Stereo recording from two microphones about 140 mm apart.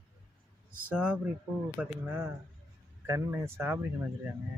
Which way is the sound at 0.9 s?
10° right (ahead or behind).